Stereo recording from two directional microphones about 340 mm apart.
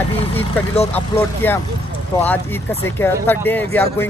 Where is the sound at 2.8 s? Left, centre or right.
Centre.